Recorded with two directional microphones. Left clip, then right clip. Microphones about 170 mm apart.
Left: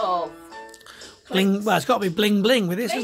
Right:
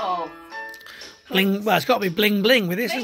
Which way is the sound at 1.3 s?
Centre (ahead or behind).